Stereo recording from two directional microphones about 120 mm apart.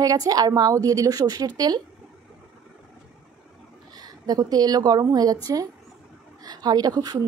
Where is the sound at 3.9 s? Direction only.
35° right (ahead or behind).